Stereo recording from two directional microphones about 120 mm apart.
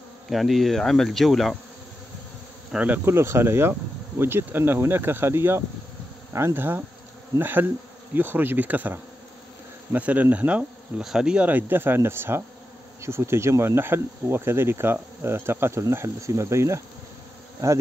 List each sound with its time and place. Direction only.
0.3 s insect: centre (ahead or behind)
2.7 s speech: 10° right (ahead or behind)
3.1 s speech: 20° right (ahead or behind)